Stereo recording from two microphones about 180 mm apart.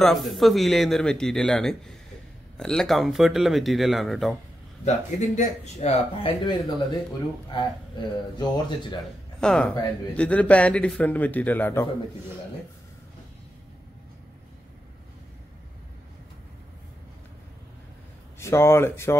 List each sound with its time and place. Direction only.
0.0 s speech: centre (ahead or behind)
4.8 s a man's voice: 40° left (ahead or behind)
9.4 s speech: 5° left (ahead or behind)
18.4 s speech: 15° left (ahead or behind)